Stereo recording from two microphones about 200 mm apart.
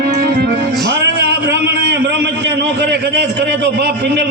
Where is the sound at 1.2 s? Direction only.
60° right (ahead or behind).